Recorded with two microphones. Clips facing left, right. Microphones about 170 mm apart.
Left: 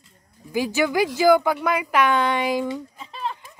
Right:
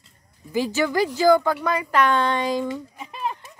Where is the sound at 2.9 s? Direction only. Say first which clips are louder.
Right 1 dB; 15° right (ahead or behind).